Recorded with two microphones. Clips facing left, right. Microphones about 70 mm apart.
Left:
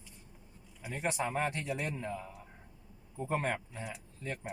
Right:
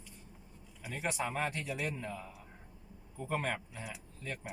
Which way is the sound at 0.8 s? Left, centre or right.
Centre.